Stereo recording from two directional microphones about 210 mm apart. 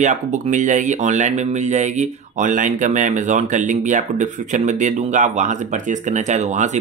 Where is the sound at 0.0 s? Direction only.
35° right (ahead or behind).